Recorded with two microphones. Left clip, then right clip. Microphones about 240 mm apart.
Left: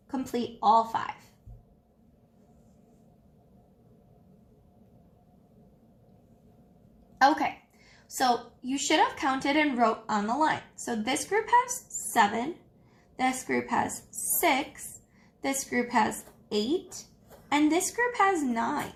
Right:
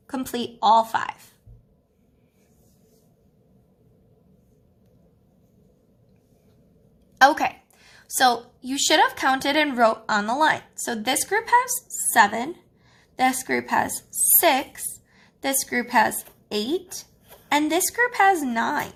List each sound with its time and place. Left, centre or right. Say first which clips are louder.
0.1 s a woman's voice: right 3 dB; right
7.2 s a sound: right 6 dB; right
8.6 s a woman's voice: right 6 dB; right
15.4 s a woman's voice: right 5 dB; right